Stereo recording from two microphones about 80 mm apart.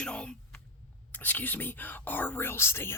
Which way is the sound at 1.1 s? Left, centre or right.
Left.